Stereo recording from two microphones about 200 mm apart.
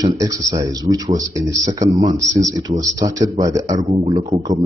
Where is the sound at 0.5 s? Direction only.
20° right (ahead or behind).